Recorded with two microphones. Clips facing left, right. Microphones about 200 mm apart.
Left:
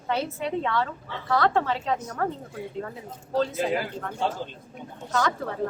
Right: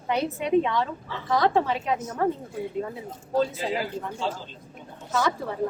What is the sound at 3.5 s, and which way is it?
Speech, 55° left (ahead or behind).